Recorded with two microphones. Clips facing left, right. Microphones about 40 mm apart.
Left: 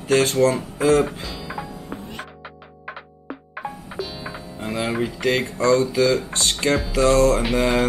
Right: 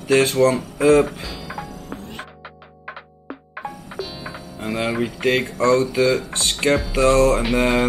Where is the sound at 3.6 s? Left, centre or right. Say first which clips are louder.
Even; centre.